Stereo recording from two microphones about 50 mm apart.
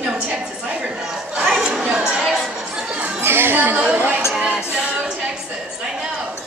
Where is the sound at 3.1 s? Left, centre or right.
Right.